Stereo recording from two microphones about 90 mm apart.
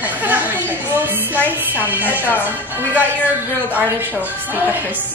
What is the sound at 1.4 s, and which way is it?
Speech, 20° right (ahead or behind).